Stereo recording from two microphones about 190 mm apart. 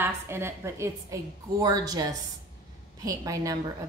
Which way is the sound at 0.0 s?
15° right (ahead or behind).